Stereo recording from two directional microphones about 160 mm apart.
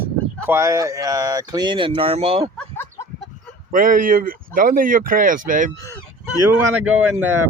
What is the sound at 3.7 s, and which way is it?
Speech, 60° right (ahead or behind).